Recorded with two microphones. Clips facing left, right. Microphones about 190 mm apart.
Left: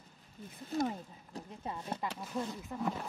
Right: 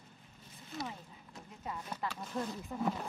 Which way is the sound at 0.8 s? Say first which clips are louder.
Left 9 dB; 40° left (ahead or behind).